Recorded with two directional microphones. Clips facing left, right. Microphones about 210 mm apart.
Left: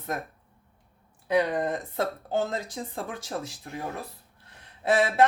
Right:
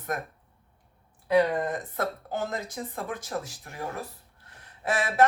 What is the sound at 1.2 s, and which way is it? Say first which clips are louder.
Speech: right 1 dB; 25° left (ahead or behind).